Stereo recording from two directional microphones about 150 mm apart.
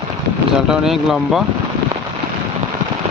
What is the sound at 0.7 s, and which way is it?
Speech, 5° right (ahead or behind).